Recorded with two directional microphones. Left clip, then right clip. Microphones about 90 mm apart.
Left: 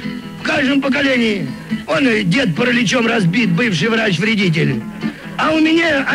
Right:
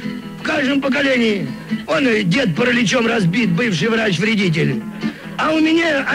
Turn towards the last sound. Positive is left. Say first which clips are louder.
# left 2 dB
turn(degrees=-40)  # may be behind; listen again after turning